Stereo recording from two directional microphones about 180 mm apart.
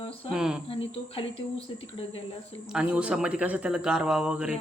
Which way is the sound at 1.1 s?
30° left (ahead or behind).